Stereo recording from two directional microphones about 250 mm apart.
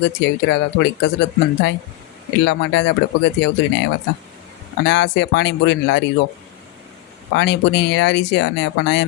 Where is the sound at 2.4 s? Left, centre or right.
Left.